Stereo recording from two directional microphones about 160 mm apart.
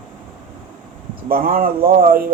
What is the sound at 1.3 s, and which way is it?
Speech, 65° right (ahead or behind).